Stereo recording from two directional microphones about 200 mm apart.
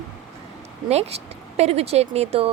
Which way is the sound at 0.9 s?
30° right (ahead or behind).